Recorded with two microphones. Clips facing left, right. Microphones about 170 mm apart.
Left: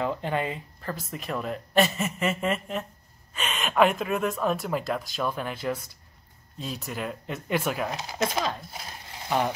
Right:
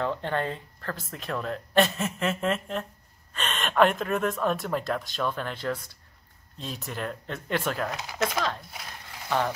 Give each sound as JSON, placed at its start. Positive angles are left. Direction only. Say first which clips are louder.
{"t": 0.0, "sound": "speech", "louder": "even", "side_deg": 10}
{"t": 7.9, "sound": "speech", "louder": "left 1 dB", "side_deg": 25}
{"t": 8.7, "sound": "a sound", "louder": "left 2 dB", "side_deg": 25}